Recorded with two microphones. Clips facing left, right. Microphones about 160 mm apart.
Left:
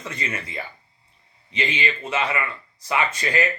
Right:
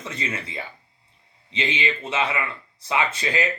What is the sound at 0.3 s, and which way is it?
Speech, 25° right (ahead or behind).